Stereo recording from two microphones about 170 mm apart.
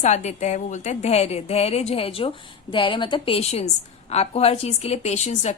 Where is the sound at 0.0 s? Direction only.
45° left (ahead or behind).